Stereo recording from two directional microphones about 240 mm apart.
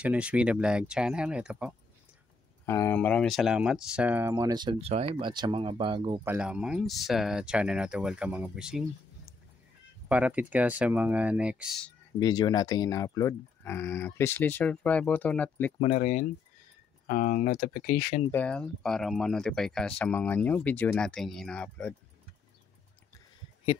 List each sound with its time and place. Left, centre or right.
0.0 s speech: centre
2.6 s speech: centre
6.2 s speech: centre
12.2 s speech: centre
15.8 s speech: left
18.3 s speech: centre